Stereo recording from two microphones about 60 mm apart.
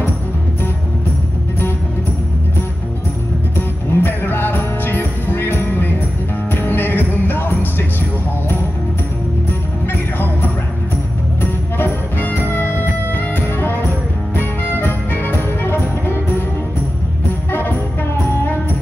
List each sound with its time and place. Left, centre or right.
3.5 s music: left
10.1 s jingle bell: left
11.8 s music: left
17.5 s music: left